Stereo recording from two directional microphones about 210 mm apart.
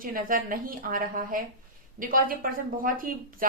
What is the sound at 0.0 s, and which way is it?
A woman's voice, 40° right (ahead or behind).